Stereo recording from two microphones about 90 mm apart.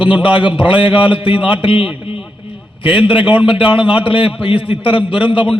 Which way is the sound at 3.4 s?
75° left (ahead or behind).